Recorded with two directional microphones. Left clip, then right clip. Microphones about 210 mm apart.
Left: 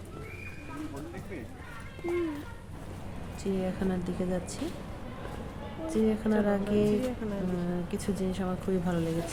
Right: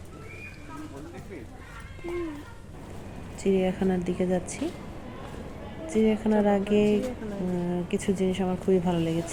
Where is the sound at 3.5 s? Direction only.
5° right (ahead or behind).